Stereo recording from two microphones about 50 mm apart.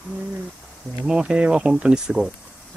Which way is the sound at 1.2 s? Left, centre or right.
Right.